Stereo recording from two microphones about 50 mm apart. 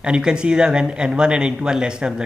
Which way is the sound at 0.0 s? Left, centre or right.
Centre.